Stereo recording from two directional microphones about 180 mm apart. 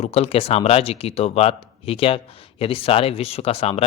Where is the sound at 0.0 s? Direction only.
35° left (ahead or behind).